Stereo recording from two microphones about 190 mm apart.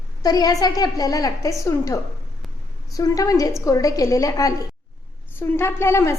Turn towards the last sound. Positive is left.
turn(degrees=15)  # may be behind; listen again after turning